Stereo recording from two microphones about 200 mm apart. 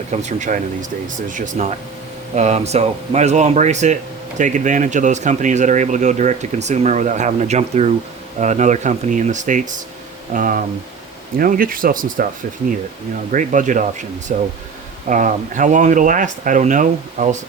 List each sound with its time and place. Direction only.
0.1 s speech: 35° right (ahead or behind)
13.3 s speech: 40° right (ahead or behind)